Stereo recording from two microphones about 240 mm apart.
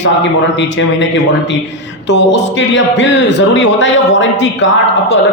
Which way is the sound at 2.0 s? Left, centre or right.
Left.